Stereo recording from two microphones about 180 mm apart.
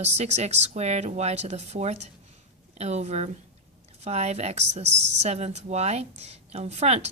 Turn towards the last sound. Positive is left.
turn(degrees=-35)  # may be behind; listen again after turning